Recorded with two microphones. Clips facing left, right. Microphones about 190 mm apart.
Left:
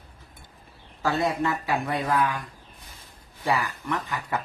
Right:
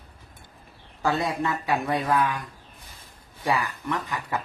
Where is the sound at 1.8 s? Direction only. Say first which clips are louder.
Right 1 dB; 20° right (ahead or behind).